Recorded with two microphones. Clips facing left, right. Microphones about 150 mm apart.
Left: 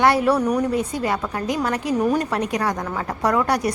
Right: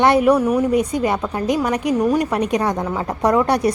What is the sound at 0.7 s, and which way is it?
A woman's voice, 15° right (ahead or behind).